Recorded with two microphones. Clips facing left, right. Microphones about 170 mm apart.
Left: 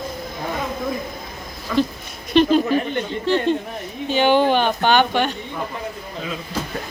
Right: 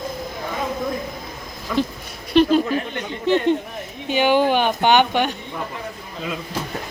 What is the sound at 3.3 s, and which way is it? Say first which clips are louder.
Speech: right 2 dB; 20° right (ahead or behind).